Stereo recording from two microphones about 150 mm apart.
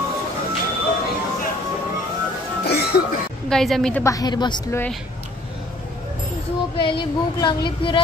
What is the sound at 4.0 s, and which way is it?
Speech, 25° left (ahead or behind).